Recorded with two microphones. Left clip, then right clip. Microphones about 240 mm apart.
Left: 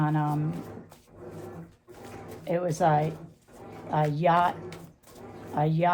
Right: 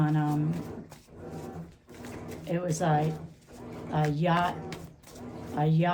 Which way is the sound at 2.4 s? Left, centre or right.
Left.